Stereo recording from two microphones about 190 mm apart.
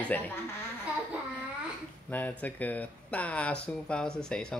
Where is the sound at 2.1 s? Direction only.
10° left (ahead or behind).